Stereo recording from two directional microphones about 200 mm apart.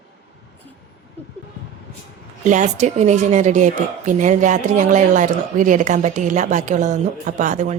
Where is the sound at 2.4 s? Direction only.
35° right (ahead or behind).